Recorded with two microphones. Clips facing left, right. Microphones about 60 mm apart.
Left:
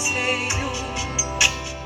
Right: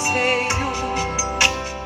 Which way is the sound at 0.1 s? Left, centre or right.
Right.